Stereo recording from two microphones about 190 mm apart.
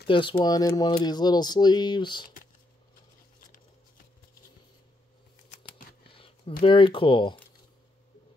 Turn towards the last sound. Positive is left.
turn(degrees=25)  # may be behind; listen again after turning